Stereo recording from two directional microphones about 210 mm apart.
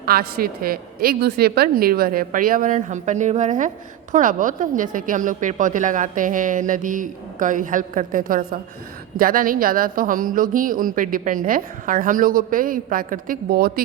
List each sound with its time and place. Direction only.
0.0 s a woman's voice: 45° right (ahead or behind)